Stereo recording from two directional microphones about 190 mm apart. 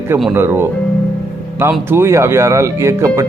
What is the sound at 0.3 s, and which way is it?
Speech, 10° right (ahead or behind).